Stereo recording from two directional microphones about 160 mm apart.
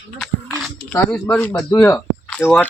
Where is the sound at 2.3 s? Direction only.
10° left (ahead or behind).